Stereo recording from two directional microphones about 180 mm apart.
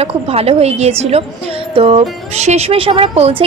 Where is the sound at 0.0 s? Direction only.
35° right (ahead or behind).